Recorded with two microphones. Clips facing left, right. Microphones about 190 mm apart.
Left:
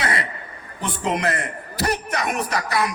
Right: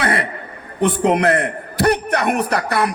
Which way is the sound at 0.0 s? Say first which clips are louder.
Right 5 dB; 60° right (ahead or behind).